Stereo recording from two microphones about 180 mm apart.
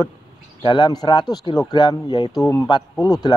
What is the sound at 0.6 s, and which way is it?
Speech, 25° left (ahead or behind).